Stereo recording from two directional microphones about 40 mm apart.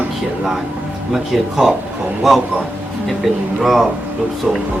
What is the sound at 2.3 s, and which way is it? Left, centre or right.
Speech, centre.